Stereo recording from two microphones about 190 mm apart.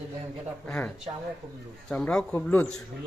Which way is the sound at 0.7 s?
10° left (ahead or behind).